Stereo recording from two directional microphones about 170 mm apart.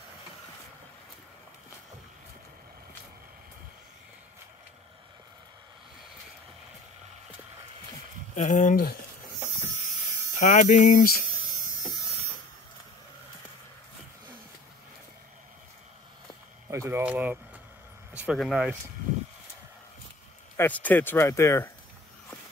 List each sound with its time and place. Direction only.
8.4 s speech: 45° left (ahead or behind)
10.4 s speech: 50° left (ahead or behind)
16.6 s speech: 20° right (ahead or behind)
17.0 s speech: 10° right (ahead or behind)
20.5 s speech: 10° left (ahead or behind)